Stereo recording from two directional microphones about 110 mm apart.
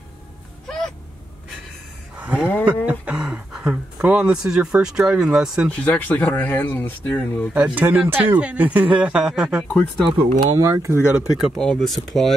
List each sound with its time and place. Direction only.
0.7 s a sound: 5° left (ahead or behind)
2.1 s a sound: 15° right (ahead or behind)
2.6 s speech: 15° right (ahead or behind)
5.7 s speech: 15° left (ahead or behind)
7.5 s speech: 10° right (ahead or behind)
10.0 s speech: 35° right (ahead or behind)
10.7 s speech: 25° right (ahead or behind)
11.1 s speech: 5° right (ahead or behind)